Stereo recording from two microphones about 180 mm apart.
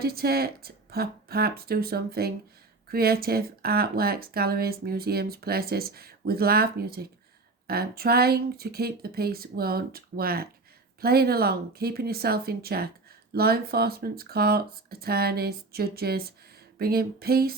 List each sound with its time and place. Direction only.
0.0 s speech: 60° right (ahead or behind)